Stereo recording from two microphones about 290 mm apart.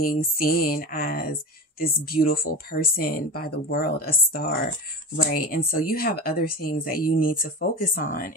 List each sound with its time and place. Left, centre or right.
0.0 s speech: left